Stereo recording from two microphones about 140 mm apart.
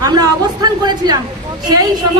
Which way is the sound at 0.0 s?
30° right (ahead or behind).